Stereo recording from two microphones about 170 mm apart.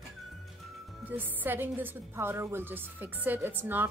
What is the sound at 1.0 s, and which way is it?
A woman's voice, 10° right (ahead or behind).